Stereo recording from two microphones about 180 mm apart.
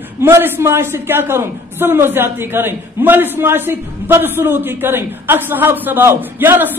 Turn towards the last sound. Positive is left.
turn(degrees=-10)  # may be behind; listen again after turning